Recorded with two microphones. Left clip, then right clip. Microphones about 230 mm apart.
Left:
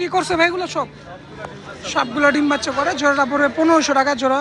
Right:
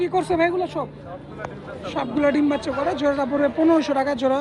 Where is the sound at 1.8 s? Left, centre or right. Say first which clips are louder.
Left 5 dB; centre.